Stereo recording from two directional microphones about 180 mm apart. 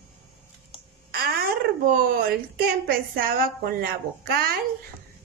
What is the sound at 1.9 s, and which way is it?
A woman's voice, 55° right (ahead or behind).